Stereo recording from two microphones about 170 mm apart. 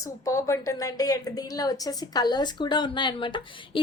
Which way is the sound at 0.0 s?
20° left (ahead or behind).